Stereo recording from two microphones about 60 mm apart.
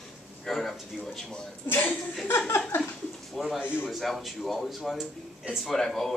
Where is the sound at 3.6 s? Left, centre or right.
Left.